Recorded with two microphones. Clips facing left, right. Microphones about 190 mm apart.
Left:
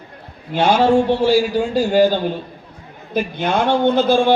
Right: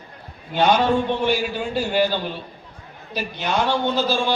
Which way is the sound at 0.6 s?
30° left (ahead or behind).